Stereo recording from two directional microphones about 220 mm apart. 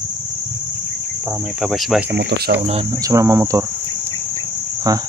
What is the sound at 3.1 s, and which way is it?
Speech, 15° right (ahead or behind).